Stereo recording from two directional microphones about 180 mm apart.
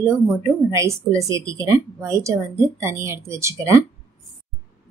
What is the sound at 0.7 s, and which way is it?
A woman's voice, 15° right (ahead or behind).